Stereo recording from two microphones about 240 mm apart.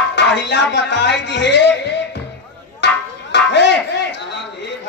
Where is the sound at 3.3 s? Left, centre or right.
Left.